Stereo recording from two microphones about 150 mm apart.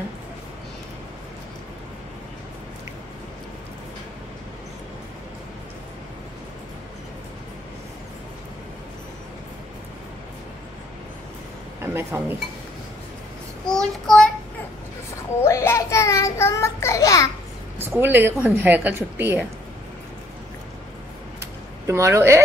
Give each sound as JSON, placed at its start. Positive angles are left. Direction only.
{"t": 11.8, "sound": "speech", "side_deg": -15}
{"t": 13.7, "sound": "child singing", "side_deg": 5}
{"t": 15.4, "sound": "child singing", "side_deg": 20}
{"t": 17.8, "sound": "a woman's voice", "side_deg": -15}
{"t": 21.4, "sound": "a sound", "side_deg": -20}